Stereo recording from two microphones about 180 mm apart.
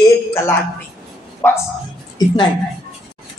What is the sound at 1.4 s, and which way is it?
Speech, 10° left (ahead or behind).